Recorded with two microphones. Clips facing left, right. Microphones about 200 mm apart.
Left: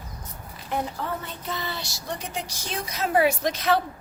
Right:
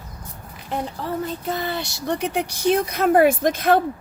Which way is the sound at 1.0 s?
30° right (ahead or behind).